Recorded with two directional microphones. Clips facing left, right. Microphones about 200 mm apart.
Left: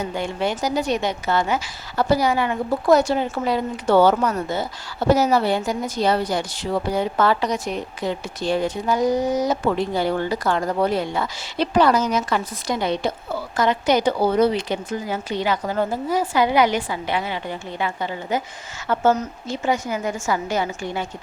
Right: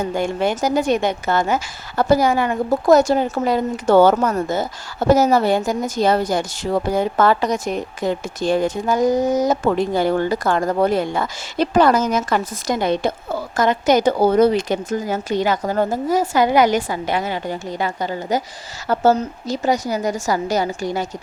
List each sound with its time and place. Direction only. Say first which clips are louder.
0.0 s a woman's voice: right 4 dB; 45° right (ahead or behind)